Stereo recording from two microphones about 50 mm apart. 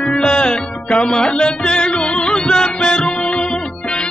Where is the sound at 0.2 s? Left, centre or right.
Centre.